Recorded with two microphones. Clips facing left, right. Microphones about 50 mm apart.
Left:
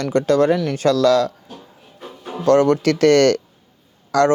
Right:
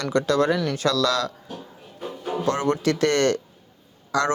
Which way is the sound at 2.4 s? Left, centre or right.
Left.